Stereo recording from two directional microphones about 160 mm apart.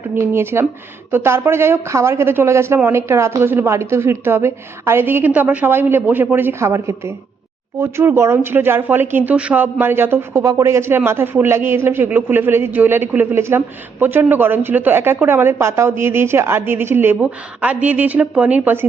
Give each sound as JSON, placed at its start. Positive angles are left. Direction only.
{"t": 0.2, "sound": "speech", "side_deg": -15}